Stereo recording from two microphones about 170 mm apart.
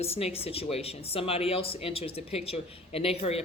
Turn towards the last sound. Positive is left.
turn(degrees=35)  # may be behind; listen again after turning